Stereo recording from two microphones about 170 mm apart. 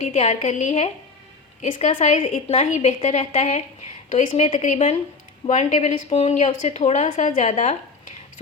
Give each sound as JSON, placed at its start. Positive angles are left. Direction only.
{"t": 0.0, "sound": "a woman's voice", "side_deg": 45}